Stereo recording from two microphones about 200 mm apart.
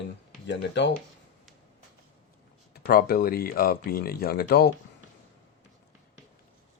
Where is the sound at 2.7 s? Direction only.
50° left (ahead or behind).